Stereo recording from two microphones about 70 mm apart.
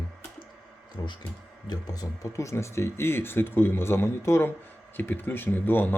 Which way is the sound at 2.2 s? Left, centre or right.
Left.